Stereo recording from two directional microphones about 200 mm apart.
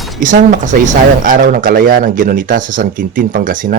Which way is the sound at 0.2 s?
40° right (ahead or behind).